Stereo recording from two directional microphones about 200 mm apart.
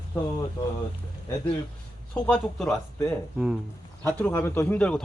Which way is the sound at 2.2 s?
5° left (ahead or behind).